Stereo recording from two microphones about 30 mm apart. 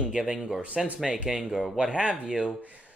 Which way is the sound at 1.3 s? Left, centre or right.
Right.